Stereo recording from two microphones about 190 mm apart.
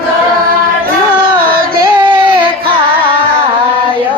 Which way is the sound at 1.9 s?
25° right (ahead or behind).